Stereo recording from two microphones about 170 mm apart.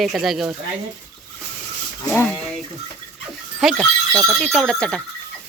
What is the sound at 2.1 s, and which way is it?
Speech, 10° left (ahead or behind).